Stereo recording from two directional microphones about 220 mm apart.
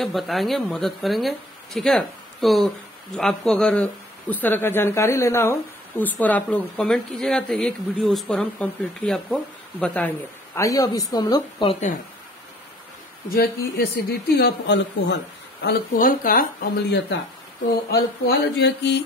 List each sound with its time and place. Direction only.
0.0 s speech: centre (ahead or behind); by 11.9 s 25° left (ahead or behind)
13.3 s speech: 45° left (ahead or behind)
17.6 s speech: 50° left (ahead or behind)